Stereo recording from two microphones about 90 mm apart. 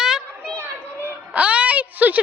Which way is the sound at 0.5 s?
25° right (ahead or behind).